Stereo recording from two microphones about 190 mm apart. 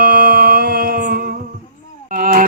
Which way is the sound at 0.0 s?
50° right (ahead or behind).